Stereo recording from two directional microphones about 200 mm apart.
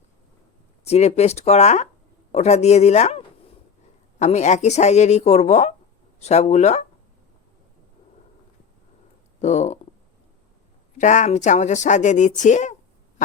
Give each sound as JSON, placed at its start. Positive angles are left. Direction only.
{"t": 0.9, "sound": "a woman's voice", "side_deg": 35}
{"t": 9.4, "sound": "a woman's voice", "side_deg": 35}
{"t": 10.9, "sound": "a woman's voice", "side_deg": 35}